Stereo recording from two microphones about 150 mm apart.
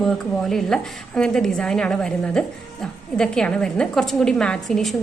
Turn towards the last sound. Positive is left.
turn(degrees=5)  # may be behind; listen again after turning